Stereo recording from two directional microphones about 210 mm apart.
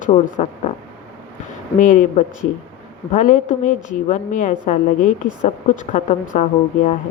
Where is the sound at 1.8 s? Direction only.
40° left (ahead or behind).